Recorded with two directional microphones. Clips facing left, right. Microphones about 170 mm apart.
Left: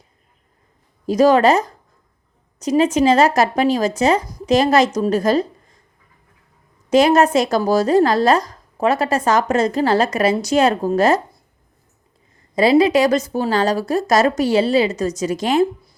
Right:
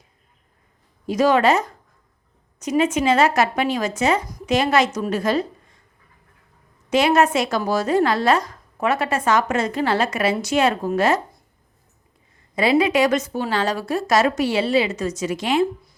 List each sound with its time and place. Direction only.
1.0 s speech: 35° left (ahead or behind)
6.9 s speech: 40° left (ahead or behind)
12.5 s speech: 35° left (ahead or behind)